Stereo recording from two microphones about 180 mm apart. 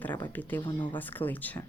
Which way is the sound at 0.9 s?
10° left (ahead or behind).